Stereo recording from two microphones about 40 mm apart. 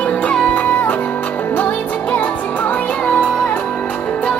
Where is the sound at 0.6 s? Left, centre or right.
Left.